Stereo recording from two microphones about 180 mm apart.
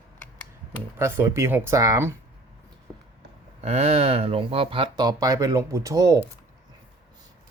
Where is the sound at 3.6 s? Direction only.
35° right (ahead or behind); by 6.1 s 20° right (ahead or behind).